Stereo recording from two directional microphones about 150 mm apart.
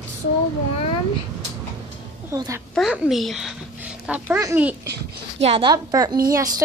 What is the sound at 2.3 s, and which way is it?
Speech, 20° right (ahead or behind).